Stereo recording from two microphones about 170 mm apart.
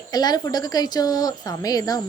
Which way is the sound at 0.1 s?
25° left (ahead or behind).